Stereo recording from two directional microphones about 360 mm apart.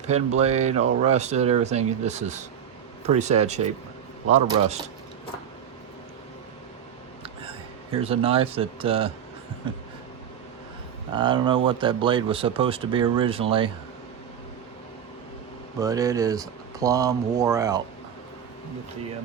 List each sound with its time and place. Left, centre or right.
0.0 s speech: centre
8.0 s speech: centre
11.1 s speech: centre
15.8 s speech: centre